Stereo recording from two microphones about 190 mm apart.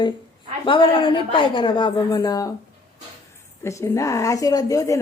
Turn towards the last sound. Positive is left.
turn(degrees=15)  # may be behind; listen again after turning